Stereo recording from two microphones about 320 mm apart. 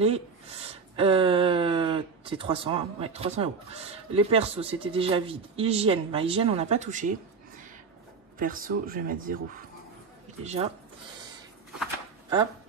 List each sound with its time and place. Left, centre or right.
0.0 s speech: centre
8.4 s speech: right
10.4 s speech: centre